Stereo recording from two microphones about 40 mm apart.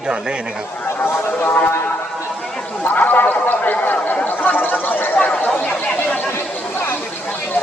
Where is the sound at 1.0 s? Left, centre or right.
Left.